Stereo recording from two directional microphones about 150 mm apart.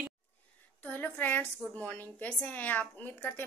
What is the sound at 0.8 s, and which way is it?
A woman's voice, 10° left (ahead or behind).